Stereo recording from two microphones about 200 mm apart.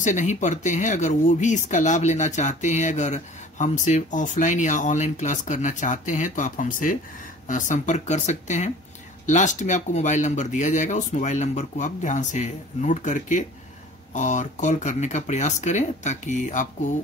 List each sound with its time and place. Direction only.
0.0 s speech: 40° left (ahead or behind)